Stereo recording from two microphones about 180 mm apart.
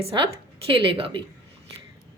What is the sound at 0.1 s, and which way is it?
Speech, 30° right (ahead or behind).